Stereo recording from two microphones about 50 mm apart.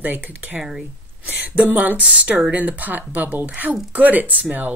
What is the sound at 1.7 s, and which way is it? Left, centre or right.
Speech, right.